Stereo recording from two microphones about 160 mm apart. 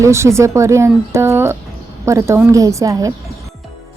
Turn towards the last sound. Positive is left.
turn(degrees=-20)  # may be behind; listen again after turning